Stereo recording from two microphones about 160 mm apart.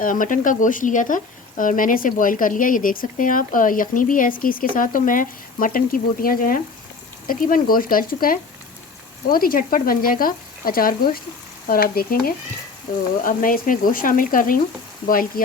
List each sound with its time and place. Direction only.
0.0 s speech: 55° left (ahead or behind)
11.7 s frying: 70° left (ahead or behind)
13.2 s speech: 60° left (ahead or behind)